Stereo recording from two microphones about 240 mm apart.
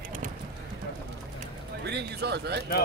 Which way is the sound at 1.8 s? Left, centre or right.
Right.